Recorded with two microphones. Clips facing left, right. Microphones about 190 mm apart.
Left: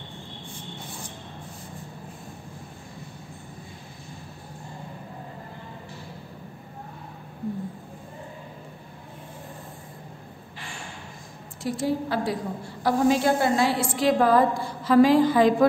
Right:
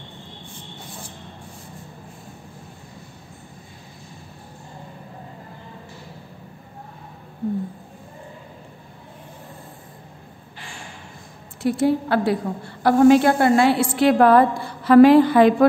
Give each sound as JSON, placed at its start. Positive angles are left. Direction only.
{"t": 11.6, "sound": "a woman's voice", "side_deg": -65}